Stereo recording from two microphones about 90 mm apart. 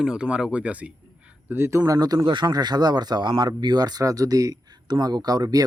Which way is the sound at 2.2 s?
60° right (ahead or behind).